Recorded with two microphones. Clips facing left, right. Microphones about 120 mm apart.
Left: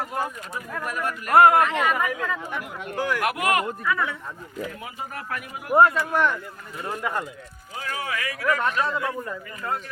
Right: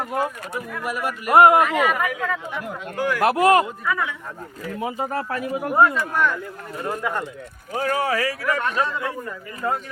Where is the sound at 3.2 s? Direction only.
30° right (ahead or behind).